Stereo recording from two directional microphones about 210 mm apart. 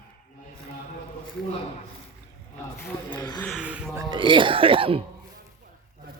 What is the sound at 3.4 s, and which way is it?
Cough, centre (ahead or behind).